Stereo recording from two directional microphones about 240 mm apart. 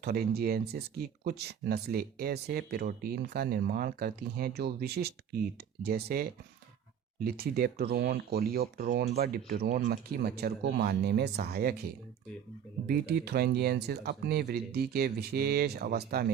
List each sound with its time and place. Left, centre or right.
0.0 s speech: right
7.3 s speech: right
12.9 s speech: right